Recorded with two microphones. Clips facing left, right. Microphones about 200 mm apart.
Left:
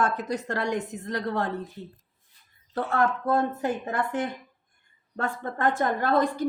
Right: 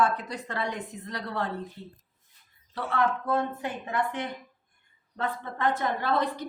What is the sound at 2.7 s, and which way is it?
A woman's voice, 45° left (ahead or behind).